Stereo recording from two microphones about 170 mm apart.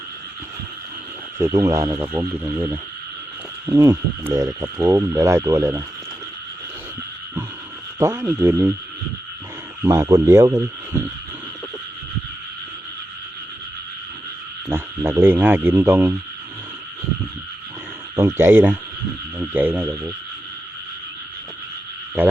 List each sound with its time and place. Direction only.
1.4 s speech: 15° right (ahead or behind)
7.9 s speech: 15° right (ahead or behind)
9.8 s speech: 15° right (ahead or behind)
14.7 s speech: 15° right (ahead or behind)
18.2 s speech: 15° right (ahead or behind)